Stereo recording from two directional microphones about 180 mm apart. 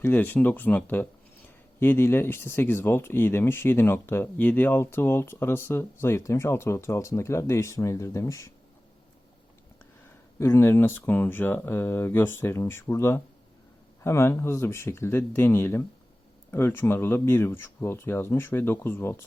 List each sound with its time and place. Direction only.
0.0 s speech: 10° left (ahead or behind)
10.3 s speech: 15° left (ahead or behind)